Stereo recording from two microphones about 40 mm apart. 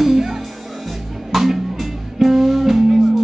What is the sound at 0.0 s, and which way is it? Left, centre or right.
Music, centre.